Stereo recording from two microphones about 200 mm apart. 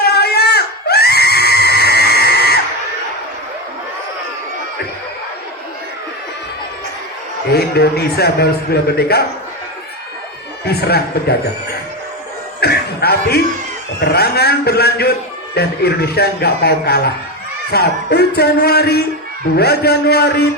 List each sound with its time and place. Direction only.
0.0 s screaming: 55° left (ahead or behind)
7.5 s a man's voice: 55° left (ahead or behind)
10.7 s a man's voice: 55° left (ahead or behind)
12.5 s a man's voice: 50° left (ahead or behind)